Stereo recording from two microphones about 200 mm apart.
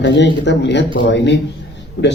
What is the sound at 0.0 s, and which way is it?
Speech, 60° left (ahead or behind).